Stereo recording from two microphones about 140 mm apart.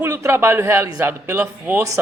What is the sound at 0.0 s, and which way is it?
A man's voice, 20° right (ahead or behind).